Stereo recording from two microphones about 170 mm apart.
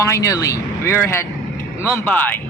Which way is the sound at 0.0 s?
20° left (ahead or behind).